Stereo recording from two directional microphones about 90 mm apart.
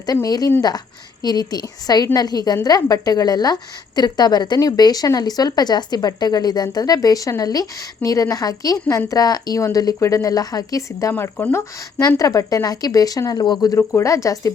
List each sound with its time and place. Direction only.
0.0 s a woman's voice: 45° left (ahead or behind)
11.1 s speech: 20° left (ahead or behind)
11.9 s a woman's voice: 40° left (ahead or behind)
13.7 s speech: 35° left (ahead or behind)